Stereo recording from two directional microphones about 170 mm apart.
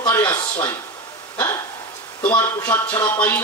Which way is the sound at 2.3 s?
10° left (ahead or behind).